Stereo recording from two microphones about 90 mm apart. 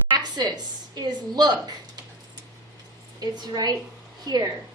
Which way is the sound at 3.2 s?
50° right (ahead or behind).